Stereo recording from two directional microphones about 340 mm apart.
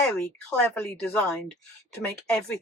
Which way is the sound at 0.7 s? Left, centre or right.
Centre.